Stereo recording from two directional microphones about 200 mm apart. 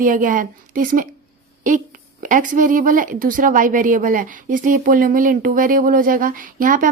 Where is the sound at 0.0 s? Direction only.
40° right (ahead or behind).